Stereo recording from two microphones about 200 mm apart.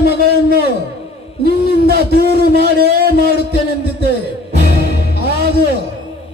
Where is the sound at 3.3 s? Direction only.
55° left (ahead or behind).